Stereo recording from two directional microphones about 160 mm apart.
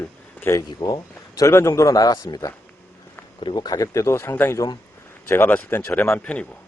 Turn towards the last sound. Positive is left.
turn(degrees=10)  # may be behind; listen again after turning